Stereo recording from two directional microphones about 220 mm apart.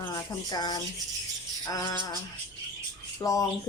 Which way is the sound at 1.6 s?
20° left (ahead or behind).